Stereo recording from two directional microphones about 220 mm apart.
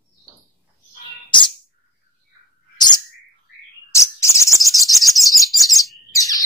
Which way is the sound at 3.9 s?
15° left (ahead or behind).